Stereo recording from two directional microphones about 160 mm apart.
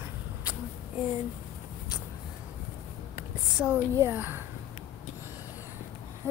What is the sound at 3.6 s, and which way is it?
Child singing, 5° right (ahead or behind).